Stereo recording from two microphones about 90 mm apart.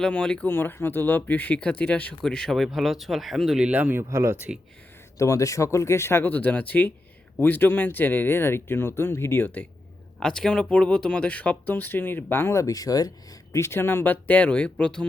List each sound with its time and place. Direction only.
0.0 s speech: 10° left (ahead or behind)
3.7 s speech: 15° right (ahead or behind)
4.1 s speech: 30° right (ahead or behind)
4.4 s speech: 10° right (ahead or behind)
5.1 s speech: 35° left (ahead or behind)
10.2 s speech: 5° left (ahead or behind); by 13.1 s 45° left (ahead or behind)
13.5 s speech: 30° left (ahead or behind); by 15.0 s 10° left (ahead or behind)